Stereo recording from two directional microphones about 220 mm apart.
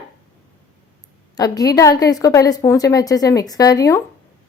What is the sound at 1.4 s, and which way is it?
A woman's voice, 15° left (ahead or behind).